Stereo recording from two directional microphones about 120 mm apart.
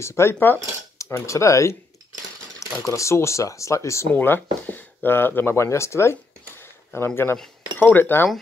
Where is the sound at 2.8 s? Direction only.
25° left (ahead or behind).